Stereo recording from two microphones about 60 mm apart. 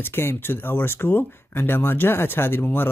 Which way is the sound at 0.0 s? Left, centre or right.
Left.